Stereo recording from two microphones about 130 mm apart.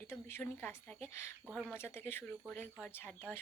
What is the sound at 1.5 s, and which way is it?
Speech, 10° right (ahead or behind).